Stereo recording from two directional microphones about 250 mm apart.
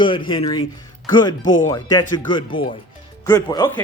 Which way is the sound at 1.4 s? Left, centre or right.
Left.